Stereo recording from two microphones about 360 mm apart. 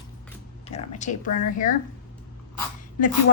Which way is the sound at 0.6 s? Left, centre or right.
Centre.